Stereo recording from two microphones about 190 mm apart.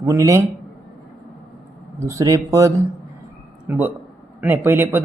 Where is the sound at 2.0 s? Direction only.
15° right (ahead or behind).